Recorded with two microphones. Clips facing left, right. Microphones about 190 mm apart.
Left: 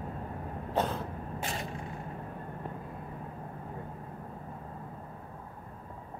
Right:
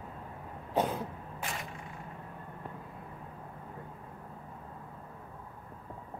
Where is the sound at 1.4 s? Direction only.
30° left (ahead or behind).